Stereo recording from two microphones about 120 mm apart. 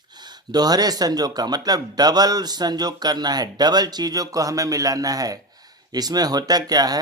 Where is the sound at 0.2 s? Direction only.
35° right (ahead or behind).